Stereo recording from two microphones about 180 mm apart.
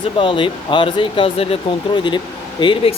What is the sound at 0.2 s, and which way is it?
Speech, 30° left (ahead or behind).